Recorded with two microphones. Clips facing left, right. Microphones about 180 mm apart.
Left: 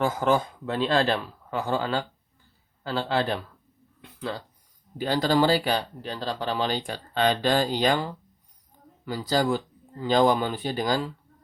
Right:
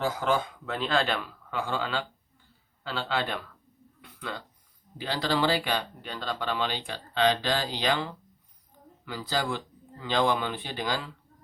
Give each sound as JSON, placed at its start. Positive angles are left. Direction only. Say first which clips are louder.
{"t": 0.0, "sound": "a man's voice", "louder": "left 4 dB", "side_deg": 45}
{"t": 4.0, "sound": "a sound", "louder": "left 5 dB", "side_deg": 30}
{"t": 4.9, "sound": "a man's voice", "louder": "left 6 dB", "side_deg": 45}